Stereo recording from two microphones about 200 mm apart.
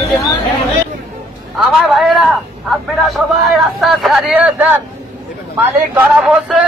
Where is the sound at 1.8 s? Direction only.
Centre (ahead or behind).